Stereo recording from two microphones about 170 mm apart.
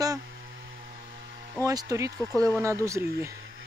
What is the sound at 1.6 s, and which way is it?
Speech, 20° right (ahead or behind).